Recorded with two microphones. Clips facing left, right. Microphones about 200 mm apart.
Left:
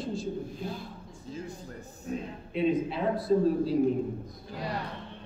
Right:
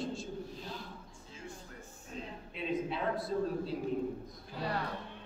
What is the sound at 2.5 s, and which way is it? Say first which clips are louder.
A woman's voice: left 8 dB; centre (ahead or behind).